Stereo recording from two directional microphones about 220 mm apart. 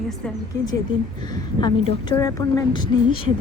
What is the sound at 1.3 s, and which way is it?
A woman's voice, 20° left (ahead or behind).